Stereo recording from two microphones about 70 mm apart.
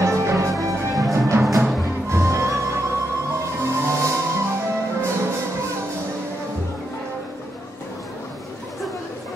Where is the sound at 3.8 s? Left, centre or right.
Right.